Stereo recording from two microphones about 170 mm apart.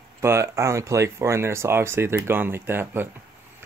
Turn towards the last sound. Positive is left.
turn(degrees=-15)  # may be behind; listen again after turning